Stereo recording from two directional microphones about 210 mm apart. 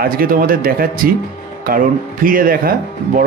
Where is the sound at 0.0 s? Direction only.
45° right (ahead or behind).